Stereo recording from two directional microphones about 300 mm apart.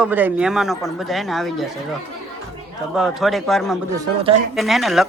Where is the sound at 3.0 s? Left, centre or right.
Centre.